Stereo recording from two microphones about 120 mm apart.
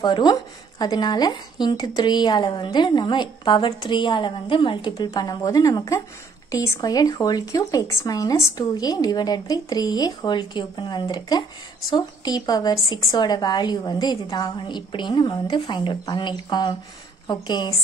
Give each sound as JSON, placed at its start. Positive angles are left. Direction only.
{"t": 0.0, "sound": "speech", "side_deg": 35}
{"t": 4.9, "sound": "speech", "side_deg": 30}